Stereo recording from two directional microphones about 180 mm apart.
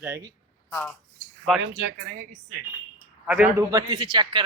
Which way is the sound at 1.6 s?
75° right (ahead or behind).